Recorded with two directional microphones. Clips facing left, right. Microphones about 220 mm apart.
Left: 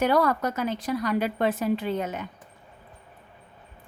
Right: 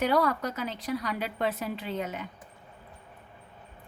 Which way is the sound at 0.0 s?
45° left (ahead or behind).